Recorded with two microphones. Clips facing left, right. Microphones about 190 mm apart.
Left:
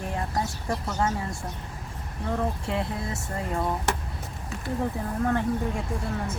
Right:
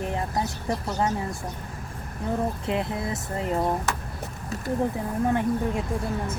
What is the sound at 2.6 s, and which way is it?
Speech, 20° right (ahead or behind).